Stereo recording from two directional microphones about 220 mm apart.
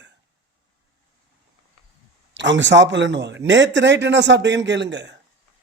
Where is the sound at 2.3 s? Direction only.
55° right (ahead or behind).